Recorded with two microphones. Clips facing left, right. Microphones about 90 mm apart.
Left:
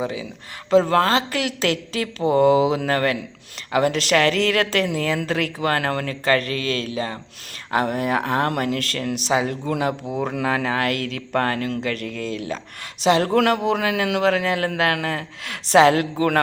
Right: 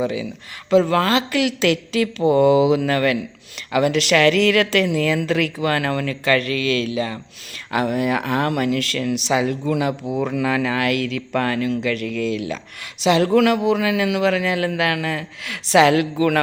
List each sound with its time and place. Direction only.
0.0 s a man's voice: 30° left (ahead or behind)